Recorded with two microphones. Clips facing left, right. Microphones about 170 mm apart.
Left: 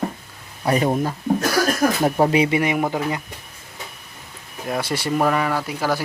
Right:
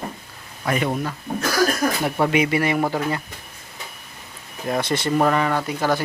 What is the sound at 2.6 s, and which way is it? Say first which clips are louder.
Speech: even; 15° left (ahead or behind).